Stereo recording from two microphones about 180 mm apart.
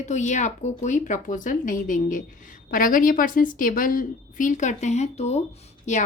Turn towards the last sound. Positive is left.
turn(degrees=40)  # may be behind; listen again after turning